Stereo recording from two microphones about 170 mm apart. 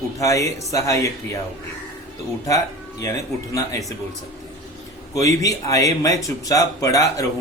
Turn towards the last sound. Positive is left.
turn(degrees=20)  # may be behind; listen again after turning